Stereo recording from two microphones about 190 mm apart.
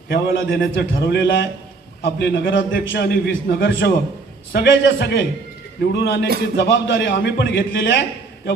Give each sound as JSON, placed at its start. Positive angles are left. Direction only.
{"t": 0.1, "sound": "a man's voice", "side_deg": 50}
{"t": 2.5, "sound": "a man's voice", "side_deg": 75}
{"t": 3.7, "sound": "a man's voice", "side_deg": 70}